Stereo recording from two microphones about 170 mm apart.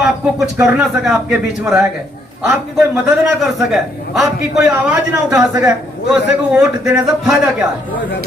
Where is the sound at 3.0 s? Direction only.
Centre (ahead or behind).